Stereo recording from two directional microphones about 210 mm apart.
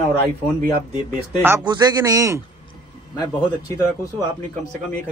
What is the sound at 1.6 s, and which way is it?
Speech, 20° right (ahead or behind).